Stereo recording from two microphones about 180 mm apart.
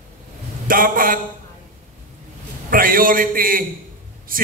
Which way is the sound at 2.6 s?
50° right (ahead or behind).